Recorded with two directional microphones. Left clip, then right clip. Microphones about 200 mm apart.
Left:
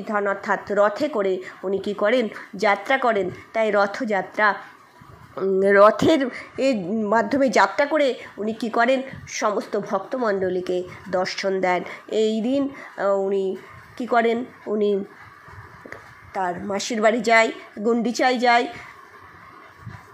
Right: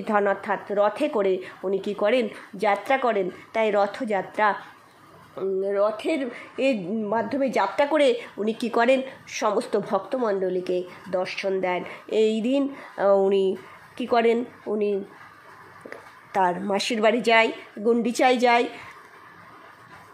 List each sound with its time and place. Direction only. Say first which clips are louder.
0.0 s speech: right 1 dB; 10° right (ahead or behind)
5.6 s speech: left 10 dB; 25° left (ahead or behind)
6.5 s speech: left 1 dB; 5° right (ahead or behind)
7.1 s speech: left 6 dB; 10° left (ahead or behind)
7.7 s speech: even; 5° right (ahead or behind)
16.3 s speech: right 3 dB; 15° right (ahead or behind)